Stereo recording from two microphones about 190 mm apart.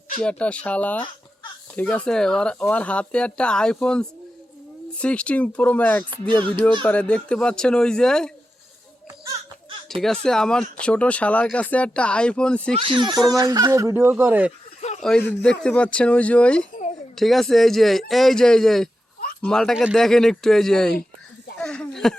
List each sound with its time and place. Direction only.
0.2 s speech: 5° left (ahead or behind)
9.9 s speech: centre (ahead or behind)
12.7 s speech: 25° right (ahead or behind); by 14.5 s 10° right (ahead or behind)
15.0 s speech: 5° left (ahead or behind)
21.6 s a sound: 5° left (ahead or behind)